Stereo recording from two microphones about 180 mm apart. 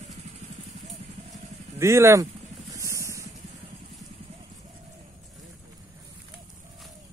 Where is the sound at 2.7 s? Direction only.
15° right (ahead or behind).